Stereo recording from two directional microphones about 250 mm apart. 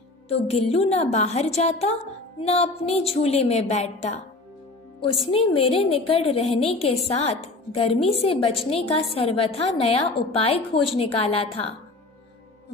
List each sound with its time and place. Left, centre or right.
0.3 s a woman's voice: left
5.2 s a woman's voice: left